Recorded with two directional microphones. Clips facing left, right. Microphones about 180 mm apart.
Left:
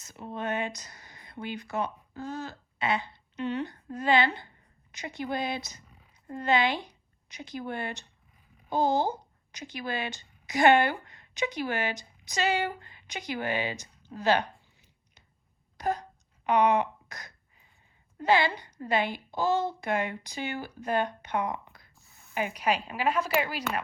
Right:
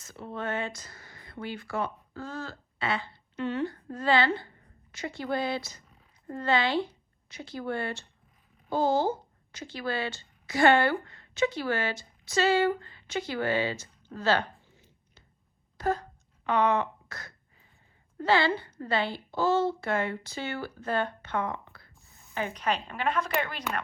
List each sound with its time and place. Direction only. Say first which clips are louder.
0.1 s a woman's voice: left 1 dB; 20° left (ahead or behind)
15.8 s a sound: right 1 dB; 15° left (ahead or behind)
18.2 s a woman's voice: even; 15° left (ahead or behind)